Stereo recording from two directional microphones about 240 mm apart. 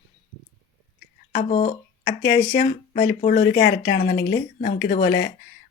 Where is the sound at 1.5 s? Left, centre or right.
Left.